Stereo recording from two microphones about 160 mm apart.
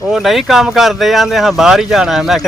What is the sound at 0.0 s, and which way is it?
Speech, centre (ahead or behind).